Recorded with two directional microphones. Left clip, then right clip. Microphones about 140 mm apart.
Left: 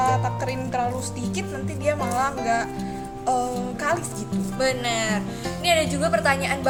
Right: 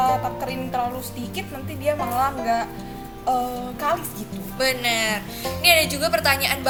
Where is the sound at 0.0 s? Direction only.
20° left (ahead or behind).